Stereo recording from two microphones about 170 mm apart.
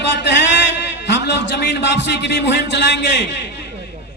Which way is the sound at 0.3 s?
90° left.